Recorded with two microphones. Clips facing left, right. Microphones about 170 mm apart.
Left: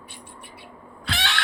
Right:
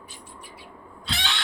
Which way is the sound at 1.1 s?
60° left (ahead or behind).